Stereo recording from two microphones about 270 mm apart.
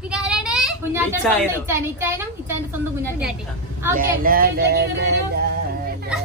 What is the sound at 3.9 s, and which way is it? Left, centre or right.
Speech, right.